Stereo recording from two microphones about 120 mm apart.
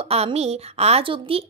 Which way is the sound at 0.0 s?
60° right (ahead or behind).